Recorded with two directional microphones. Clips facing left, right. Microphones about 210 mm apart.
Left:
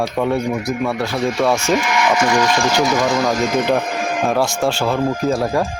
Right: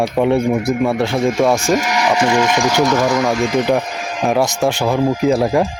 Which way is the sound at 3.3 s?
50° left (ahead or behind).